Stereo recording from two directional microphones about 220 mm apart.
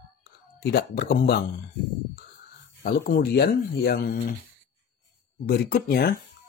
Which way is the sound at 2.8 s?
40° left (ahead or behind).